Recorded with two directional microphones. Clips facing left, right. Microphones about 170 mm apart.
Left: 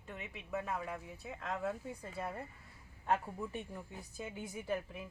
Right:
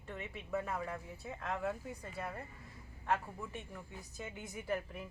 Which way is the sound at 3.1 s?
15° left (ahead or behind).